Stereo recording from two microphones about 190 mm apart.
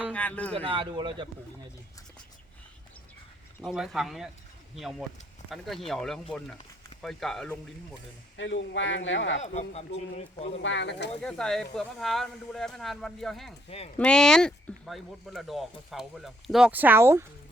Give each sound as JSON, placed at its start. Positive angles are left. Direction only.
{"t": 0.1, "sound": "speech", "side_deg": 10}
{"t": 0.5, "sound": "speech", "side_deg": -30}
{"t": 3.6, "sound": "speech", "side_deg": 0}
{"t": 8.4, "sound": "speech", "side_deg": 75}
{"t": 9.4, "sound": "speech", "side_deg": 35}
{"t": 10.6, "sound": "speech", "side_deg": 70}
{"t": 11.2, "sound": "speech", "side_deg": 5}
{"t": 13.7, "sound": "speech", "side_deg": 30}
{"t": 14.0, "sound": "speech", "side_deg": 5}